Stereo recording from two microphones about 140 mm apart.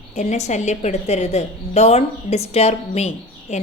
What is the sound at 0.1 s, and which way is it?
A woman's voice, 55° left (ahead or behind).